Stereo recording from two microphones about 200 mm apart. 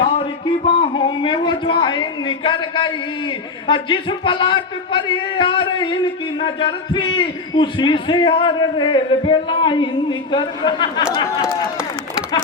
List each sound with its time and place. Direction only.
0.0 s a man's voice: 30° left (ahead or behind)